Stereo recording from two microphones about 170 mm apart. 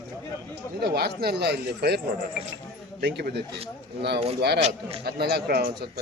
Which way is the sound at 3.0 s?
90° right.